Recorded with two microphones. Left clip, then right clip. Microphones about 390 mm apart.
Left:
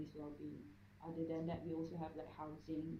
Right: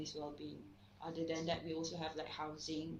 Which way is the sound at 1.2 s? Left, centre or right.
Right.